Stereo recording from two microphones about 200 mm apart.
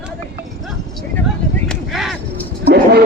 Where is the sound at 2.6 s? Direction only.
55° right (ahead or behind).